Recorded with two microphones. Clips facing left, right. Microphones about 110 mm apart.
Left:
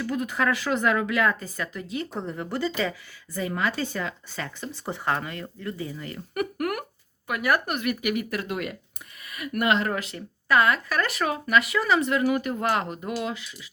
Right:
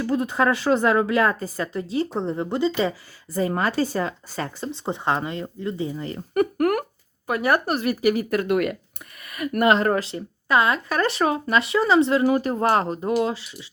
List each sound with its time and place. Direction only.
0.0 s a woman's voice: 30° right (ahead or behind)
3.3 s a woman's voice: 40° right (ahead or behind)
4.7 s a woman's voice: 20° right (ahead or behind)
8.4 s speech: 60° right (ahead or behind)
9.2 s a woman's voice: 45° right (ahead or behind); by 13.7 s 30° right (ahead or behind)